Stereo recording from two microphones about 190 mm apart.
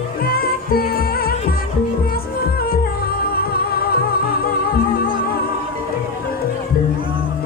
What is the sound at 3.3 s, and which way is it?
Music, 55° left (ahead or behind).